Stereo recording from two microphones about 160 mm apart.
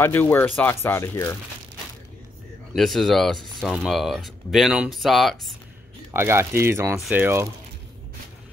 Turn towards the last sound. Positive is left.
turn(degrees=-10)  # may be behind; listen again after turning